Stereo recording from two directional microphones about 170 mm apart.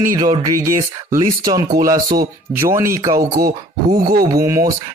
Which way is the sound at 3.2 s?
60° right (ahead or behind).